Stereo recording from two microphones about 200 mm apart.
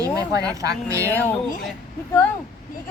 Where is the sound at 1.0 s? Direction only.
10° left (ahead or behind).